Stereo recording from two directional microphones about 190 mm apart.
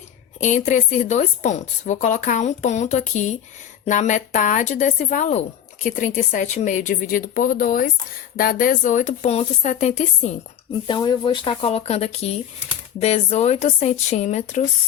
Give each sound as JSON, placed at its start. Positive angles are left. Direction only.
{"t": 0.3, "sound": "a woman's voice", "side_deg": 40}
{"t": 10.8, "sound": "a woman's voice", "side_deg": 20}